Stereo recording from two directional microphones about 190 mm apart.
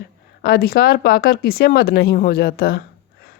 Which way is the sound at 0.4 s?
55° left (ahead or behind).